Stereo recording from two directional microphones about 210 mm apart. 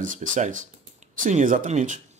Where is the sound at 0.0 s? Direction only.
40° right (ahead or behind).